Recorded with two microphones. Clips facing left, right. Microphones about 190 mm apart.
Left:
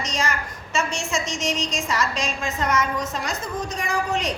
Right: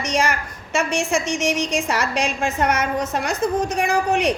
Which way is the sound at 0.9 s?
10° right (ahead or behind).